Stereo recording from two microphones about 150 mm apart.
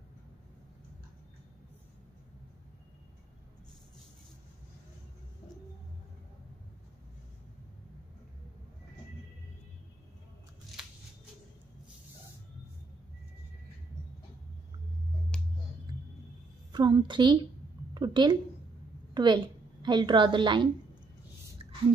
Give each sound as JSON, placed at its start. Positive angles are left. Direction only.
{"t": 16.7, "sound": "a child's voice", "side_deg": -30}